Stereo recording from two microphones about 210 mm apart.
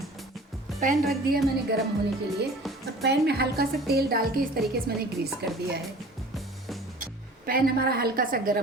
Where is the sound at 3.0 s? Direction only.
50° right (ahead or behind).